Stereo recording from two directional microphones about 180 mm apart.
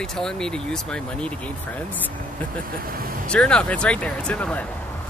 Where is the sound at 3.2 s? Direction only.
5° left (ahead or behind).